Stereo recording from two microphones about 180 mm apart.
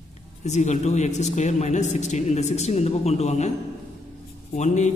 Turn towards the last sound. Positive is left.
turn(degrees=40)  # may be behind; listen again after turning